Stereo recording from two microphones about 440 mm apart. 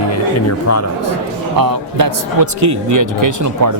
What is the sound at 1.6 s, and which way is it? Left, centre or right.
A man's voice, right.